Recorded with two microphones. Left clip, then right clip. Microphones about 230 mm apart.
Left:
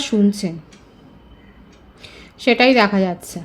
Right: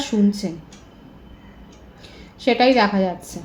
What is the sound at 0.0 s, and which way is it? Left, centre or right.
Speech, left.